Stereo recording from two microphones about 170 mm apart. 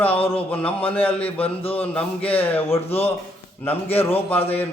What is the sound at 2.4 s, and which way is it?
Speech, 10° left (ahead or behind).